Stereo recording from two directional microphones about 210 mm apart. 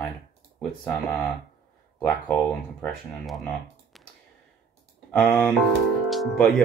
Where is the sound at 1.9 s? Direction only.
5° left (ahead or behind).